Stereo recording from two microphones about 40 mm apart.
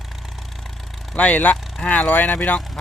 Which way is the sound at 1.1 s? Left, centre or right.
Left.